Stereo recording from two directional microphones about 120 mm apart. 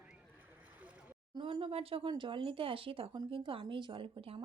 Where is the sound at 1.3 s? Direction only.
40° right (ahead or behind).